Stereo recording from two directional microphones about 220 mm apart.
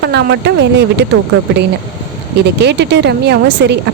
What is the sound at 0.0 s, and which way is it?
A woman's voice, 50° right (ahead or behind).